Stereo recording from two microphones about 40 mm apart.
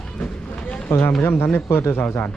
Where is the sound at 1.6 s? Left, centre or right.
Left.